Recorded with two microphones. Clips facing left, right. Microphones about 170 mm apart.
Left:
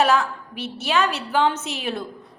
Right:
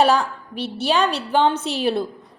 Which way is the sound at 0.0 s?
30° right (ahead or behind).